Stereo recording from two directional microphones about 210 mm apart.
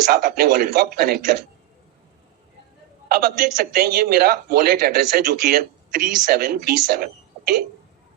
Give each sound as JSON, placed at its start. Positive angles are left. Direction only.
{"t": 0.1, "sound": "a man's voice", "side_deg": -45}
{"t": 3.1, "sound": "a man's voice", "side_deg": -45}